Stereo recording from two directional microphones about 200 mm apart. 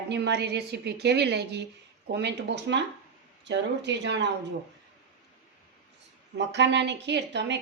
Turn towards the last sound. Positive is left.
turn(degrees=-60)  # may be behind; listen again after turning